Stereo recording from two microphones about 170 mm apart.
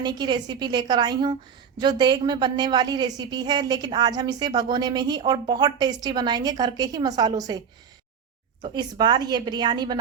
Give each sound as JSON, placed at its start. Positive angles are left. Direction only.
{"t": 0.0, "sound": "a woman's voice", "side_deg": -25}
{"t": 8.6, "sound": "a woman's voice", "side_deg": -25}